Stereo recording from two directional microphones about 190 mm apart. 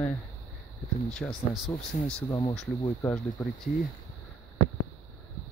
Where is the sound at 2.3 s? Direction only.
20° left (ahead or behind).